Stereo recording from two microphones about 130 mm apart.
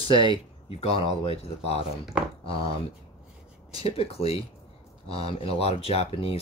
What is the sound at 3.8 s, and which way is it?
Speech, 50° left (ahead or behind).